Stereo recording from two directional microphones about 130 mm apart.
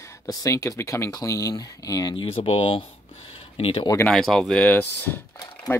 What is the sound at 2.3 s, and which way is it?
Speech, 50° left (ahead or behind).